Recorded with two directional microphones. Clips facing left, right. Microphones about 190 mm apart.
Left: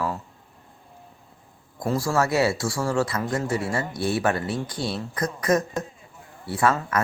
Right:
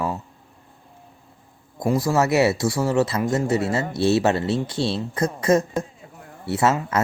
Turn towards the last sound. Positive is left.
turn(degrees=-25)  # may be behind; listen again after turning